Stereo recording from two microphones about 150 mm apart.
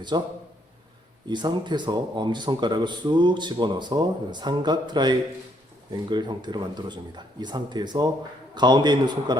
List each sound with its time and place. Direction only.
0.1 s speech: 30° right (ahead or behind)
1.3 s speech: 30° right (ahead or behind)